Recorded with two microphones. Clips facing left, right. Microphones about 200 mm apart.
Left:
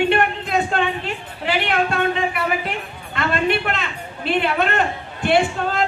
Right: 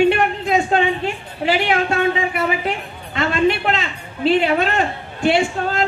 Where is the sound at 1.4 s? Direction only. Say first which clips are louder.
Right 3 dB; 55° left (ahead or behind).